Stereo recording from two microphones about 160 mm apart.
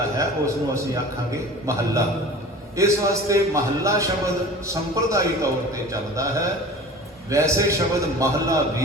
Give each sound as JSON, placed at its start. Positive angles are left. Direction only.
{"t": 0.2, "sound": "a man's voice", "side_deg": -20}